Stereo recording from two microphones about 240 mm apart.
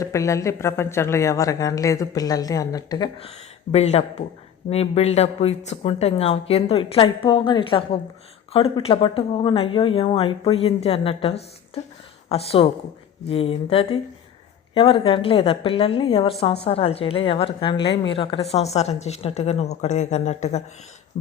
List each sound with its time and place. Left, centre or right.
0.0 s a woman's voice: centre; by 20.6 s left